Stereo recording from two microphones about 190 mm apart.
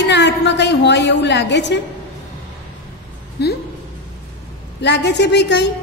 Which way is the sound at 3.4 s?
60° left (ahead or behind).